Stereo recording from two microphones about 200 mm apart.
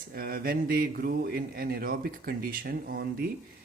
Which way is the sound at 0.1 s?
50° right (ahead or behind).